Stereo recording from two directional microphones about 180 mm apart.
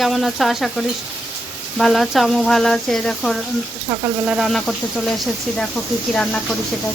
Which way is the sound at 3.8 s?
15° right (ahead or behind).